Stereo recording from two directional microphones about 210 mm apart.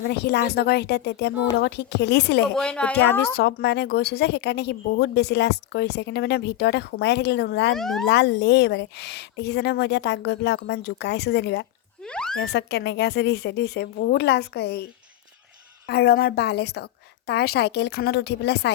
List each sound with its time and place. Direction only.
0.1 s speech: 50° left (ahead or behind)
2.6 s a woman's voice: 5° left (ahead or behind)
3.3 s speech: 50° left (ahead or behind)
7.8 s speech: centre (ahead or behind)
8.0 s speech: 55° left (ahead or behind)
12.0 s a sound: 5° left (ahead or behind)
12.4 s speech: 55° left (ahead or behind)
15.9 s speech: 50° left (ahead or behind)